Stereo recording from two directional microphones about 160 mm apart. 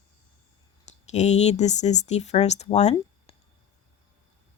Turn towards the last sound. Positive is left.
turn(degrees=45)  # may be behind; listen again after turning